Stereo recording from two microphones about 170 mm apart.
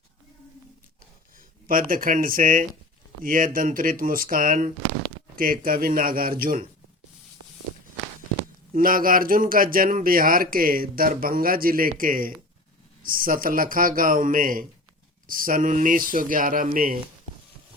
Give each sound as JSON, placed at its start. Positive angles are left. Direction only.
{"t": 1.6, "sound": "speech", "side_deg": -55}
{"t": 8.7, "sound": "speech", "side_deg": -55}